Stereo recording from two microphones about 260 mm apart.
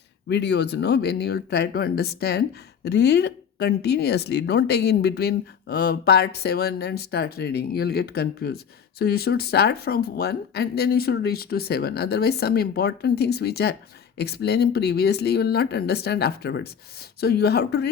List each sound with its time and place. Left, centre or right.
0.3 s speech: left